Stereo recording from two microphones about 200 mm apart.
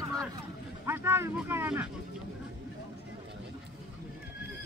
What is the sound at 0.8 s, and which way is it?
Speech, 10° right (ahead or behind).